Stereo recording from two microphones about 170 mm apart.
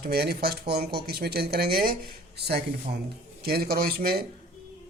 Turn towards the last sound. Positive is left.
turn(degrees=-60)  # may be behind; listen again after turning